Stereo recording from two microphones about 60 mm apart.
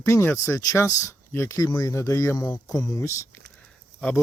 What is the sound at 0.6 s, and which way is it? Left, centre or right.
Speech, left.